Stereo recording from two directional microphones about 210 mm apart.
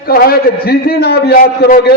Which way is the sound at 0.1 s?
45° left (ahead or behind).